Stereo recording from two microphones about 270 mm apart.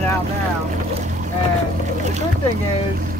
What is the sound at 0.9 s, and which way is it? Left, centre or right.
Boat, right.